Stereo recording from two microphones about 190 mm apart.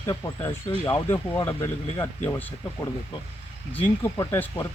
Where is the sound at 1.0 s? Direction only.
10° left (ahead or behind).